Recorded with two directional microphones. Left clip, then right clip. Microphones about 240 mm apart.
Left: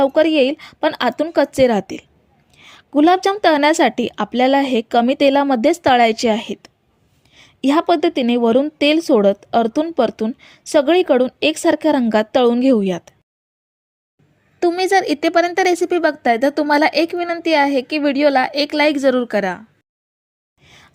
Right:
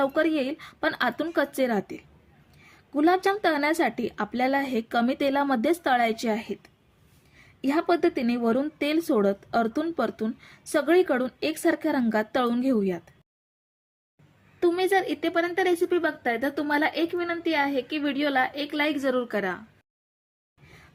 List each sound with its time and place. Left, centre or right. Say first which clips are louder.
0.0 s a woman's voice: left 11 dB; left
14.6 s a woman's voice: left 8 dB; left
20.7 s a sound: left 7 dB; left